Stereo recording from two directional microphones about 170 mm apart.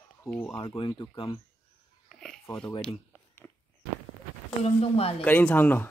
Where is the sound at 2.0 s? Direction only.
Centre (ahead or behind).